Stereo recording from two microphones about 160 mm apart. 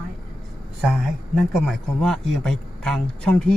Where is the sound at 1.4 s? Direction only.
5° left (ahead or behind).